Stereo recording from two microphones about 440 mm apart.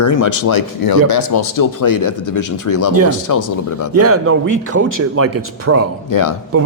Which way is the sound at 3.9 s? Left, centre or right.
Right.